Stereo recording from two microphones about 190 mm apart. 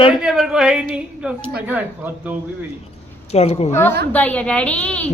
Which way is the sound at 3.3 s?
35° left (ahead or behind).